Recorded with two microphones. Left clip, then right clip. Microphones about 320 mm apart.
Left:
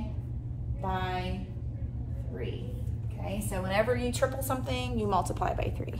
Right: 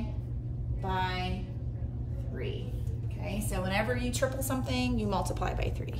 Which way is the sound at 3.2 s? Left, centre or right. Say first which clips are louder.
Even; left.